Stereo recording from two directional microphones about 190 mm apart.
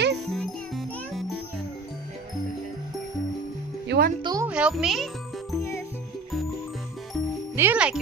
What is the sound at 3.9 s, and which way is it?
Music, 65° right (ahead or behind).